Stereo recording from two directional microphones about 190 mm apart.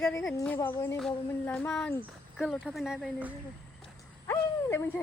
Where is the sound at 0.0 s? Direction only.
15° left (ahead or behind); by 3.3 s 5° right (ahead or behind).